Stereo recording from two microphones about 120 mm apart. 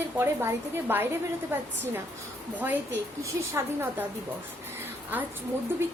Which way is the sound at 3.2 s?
20° right (ahead or behind).